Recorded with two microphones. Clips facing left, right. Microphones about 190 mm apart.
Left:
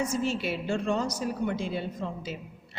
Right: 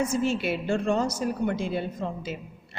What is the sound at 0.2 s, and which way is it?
A woman's voice, 60° right (ahead or behind).